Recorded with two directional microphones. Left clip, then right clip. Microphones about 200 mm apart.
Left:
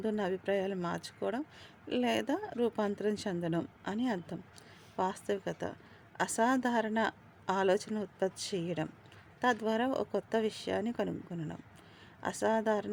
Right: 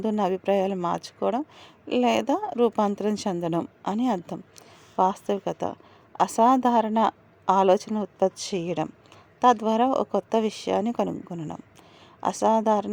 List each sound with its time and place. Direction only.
0.0 s speech: 20° right (ahead or behind)